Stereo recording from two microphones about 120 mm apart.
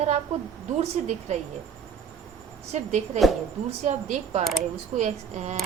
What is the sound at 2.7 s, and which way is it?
A woman's voice, 70° right (ahead or behind).